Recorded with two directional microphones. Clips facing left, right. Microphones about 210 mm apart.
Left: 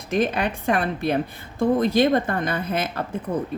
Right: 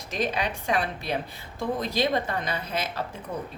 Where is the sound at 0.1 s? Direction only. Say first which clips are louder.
Left 6 dB; 55° left (ahead or behind).